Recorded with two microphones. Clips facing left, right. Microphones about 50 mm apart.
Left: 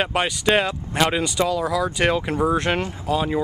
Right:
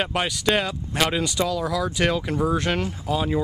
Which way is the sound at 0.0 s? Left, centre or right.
Centre.